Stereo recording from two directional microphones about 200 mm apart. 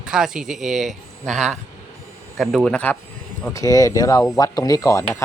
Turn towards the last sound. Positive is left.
turn(degrees=15)  # may be behind; listen again after turning